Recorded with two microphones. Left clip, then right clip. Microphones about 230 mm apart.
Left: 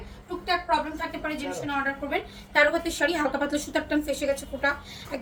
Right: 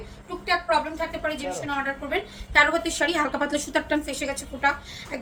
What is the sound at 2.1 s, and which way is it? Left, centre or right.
A woman's voice, centre.